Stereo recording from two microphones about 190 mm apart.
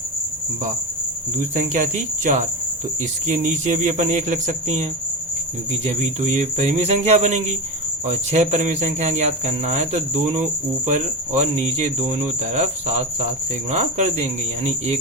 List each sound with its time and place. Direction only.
1.4 s speech: 40° right (ahead or behind)